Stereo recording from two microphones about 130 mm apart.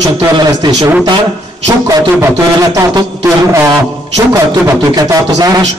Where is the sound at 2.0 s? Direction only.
25° right (ahead or behind).